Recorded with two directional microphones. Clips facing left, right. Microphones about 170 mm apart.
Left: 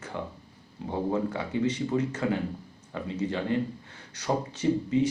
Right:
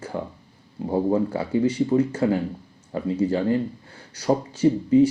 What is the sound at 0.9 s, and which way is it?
Speech, 35° right (ahead or behind).